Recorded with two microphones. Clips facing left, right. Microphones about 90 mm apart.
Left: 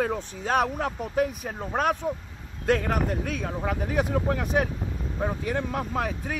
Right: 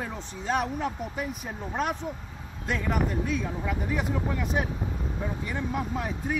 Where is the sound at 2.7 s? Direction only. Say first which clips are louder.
Left 4 dB; 65° left (ahead or behind).